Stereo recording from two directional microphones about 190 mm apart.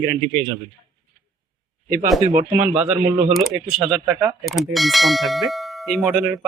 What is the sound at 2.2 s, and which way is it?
Speech, 45° right (ahead or behind).